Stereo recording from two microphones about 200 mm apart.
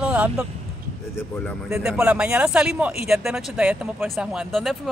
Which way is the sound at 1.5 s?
5° right (ahead or behind).